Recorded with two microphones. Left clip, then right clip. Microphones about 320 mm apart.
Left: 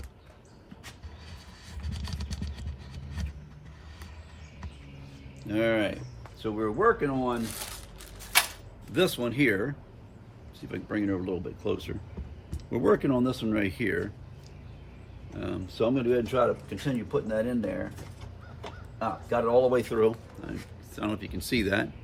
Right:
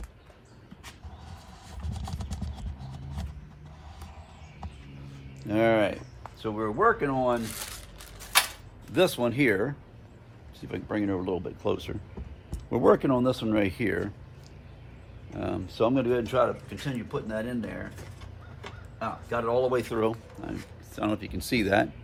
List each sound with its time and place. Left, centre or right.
5.4 s speech: centre
7.4 s speech: centre
8.9 s speech: centre
15.3 s speech: centre